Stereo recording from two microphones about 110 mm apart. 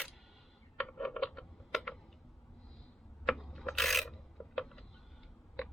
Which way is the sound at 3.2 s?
Centre (ahead or behind).